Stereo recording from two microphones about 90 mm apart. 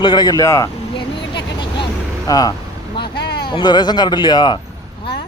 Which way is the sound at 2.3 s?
45° left (ahead or behind).